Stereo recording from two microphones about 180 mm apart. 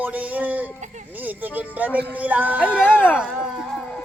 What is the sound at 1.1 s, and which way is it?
Speech, 10° right (ahead or behind).